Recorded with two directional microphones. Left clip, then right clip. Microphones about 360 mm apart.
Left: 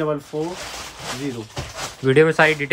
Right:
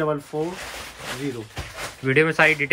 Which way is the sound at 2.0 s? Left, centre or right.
Centre.